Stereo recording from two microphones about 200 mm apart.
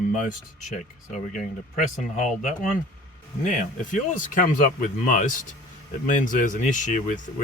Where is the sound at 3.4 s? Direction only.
40° left (ahead or behind).